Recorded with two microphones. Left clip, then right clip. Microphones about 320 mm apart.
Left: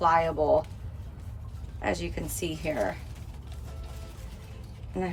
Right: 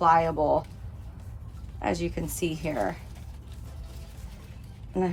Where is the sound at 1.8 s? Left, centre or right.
Centre.